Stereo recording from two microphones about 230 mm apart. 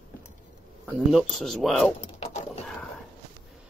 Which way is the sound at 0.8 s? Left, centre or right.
Centre.